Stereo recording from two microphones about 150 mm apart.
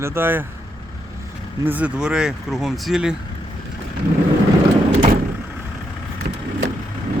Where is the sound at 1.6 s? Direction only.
10° right (ahead or behind).